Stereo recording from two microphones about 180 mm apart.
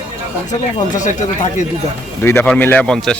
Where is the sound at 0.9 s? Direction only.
45° left (ahead or behind).